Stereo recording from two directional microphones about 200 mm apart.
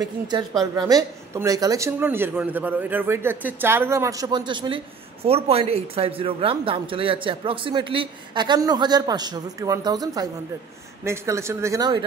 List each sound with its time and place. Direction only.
0.0 s speech: 20° right (ahead or behind)